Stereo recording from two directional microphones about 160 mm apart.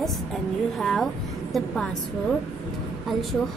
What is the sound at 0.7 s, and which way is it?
A woman's voice, centre (ahead or behind).